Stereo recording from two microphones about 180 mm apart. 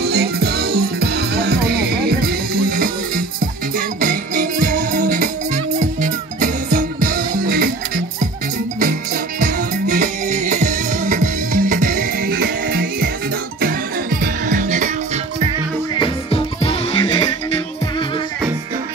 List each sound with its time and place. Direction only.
0.0 s music: 60° right (ahead or behind)
9.4 s music: 45° right (ahead or behind)
14.2 s music: 45° right (ahead or behind)
16.0 s music: 30° left (ahead or behind)